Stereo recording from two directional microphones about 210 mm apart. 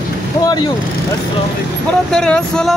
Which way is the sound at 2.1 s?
5° left (ahead or behind).